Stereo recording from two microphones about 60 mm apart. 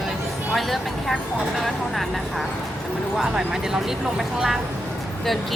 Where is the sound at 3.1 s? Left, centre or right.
Centre.